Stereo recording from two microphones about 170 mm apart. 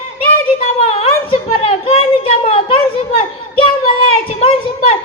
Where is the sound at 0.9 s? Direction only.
35° left (ahead or behind).